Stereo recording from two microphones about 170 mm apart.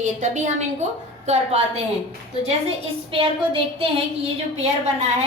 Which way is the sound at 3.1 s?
30° right (ahead or behind).